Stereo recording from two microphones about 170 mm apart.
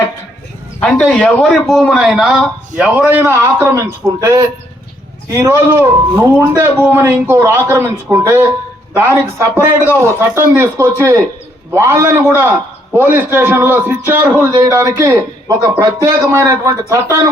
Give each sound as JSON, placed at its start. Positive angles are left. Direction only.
{"t": 0.8, "sound": "a man's voice", "side_deg": 5}